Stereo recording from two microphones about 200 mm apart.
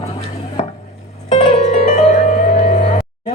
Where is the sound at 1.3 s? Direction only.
35° left (ahead or behind).